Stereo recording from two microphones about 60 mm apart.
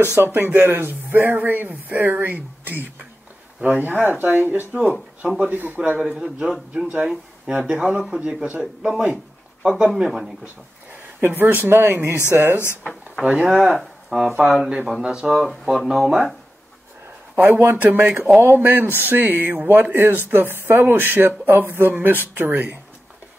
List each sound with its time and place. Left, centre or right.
0.2 s a man's voice: right
5.9 s speech: centre
10.4 s a sound: right
11.6 s speech: right
13.2 s speech: centre
17.4 s speech: right